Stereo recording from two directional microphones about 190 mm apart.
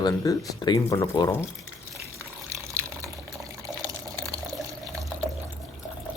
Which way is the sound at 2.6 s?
15° right (ahead or behind).